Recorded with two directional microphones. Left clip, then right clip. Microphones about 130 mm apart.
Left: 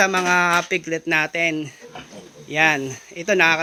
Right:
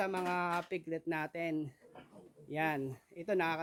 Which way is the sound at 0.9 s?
25° right (ahead or behind).